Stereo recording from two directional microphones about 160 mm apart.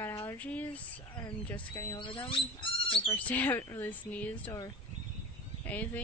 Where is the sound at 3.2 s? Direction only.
10° left (ahead or behind).